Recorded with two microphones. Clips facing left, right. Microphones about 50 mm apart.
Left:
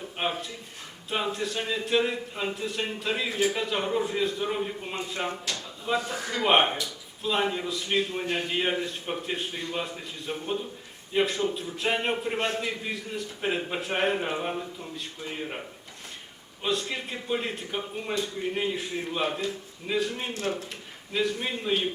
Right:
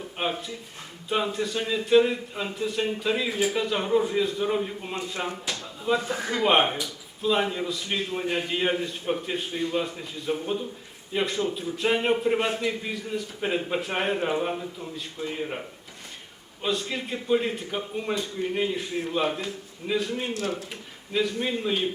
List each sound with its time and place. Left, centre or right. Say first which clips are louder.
0.2 s a man's voice: right 1 dB; centre
6.1 s speech: right 3 dB; right
6.4 s a man's voice: even; centre
16.6 s a man's voice: right 1 dB; centre